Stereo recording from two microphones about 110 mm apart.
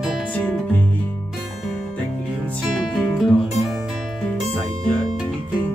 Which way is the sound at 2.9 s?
Centre (ahead or behind).